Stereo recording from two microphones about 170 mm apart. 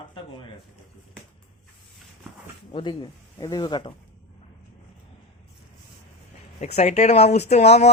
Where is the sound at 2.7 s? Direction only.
30° left (ahead or behind).